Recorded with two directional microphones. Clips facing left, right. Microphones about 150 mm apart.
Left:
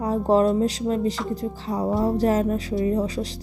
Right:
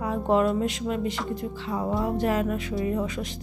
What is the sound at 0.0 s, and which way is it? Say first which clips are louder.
Speech: left 4 dB; 35° left (ahead or behind).